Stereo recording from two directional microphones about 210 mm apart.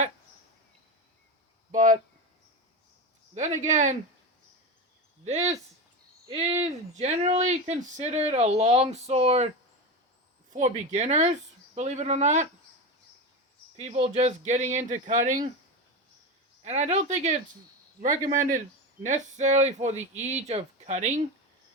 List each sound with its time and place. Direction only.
1.7 s a sound: 40° right (ahead or behind)
3.3 s speech: 35° right (ahead or behind)
5.2 s speech: 35° right (ahead or behind)
10.5 s speech: 35° right (ahead or behind)
13.7 s speech: 30° right (ahead or behind)
16.6 s speech: 30° right (ahead or behind)